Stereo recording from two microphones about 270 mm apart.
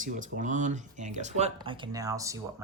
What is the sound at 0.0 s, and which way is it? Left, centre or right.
Speech, right.